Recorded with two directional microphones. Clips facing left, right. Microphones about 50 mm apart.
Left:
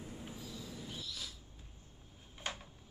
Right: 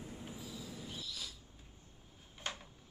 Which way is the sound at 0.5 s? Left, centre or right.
Centre.